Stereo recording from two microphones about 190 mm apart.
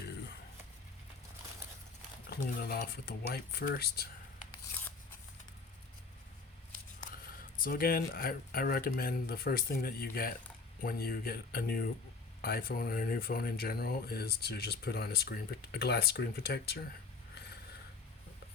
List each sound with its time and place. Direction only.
2.3 s speech: 55° left (ahead or behind)
7.1 s speech: 50° left (ahead or behind)